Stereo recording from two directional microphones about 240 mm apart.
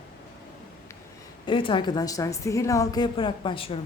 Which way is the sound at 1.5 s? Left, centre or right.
Left.